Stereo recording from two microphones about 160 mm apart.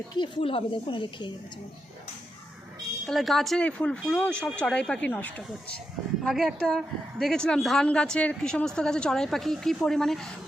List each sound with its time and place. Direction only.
0.2 s speech: 35° left (ahead or behind)
3.1 s a woman's voice: centre (ahead or behind)